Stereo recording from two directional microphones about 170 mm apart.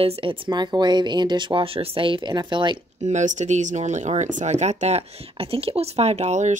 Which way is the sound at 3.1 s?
45° right (ahead or behind).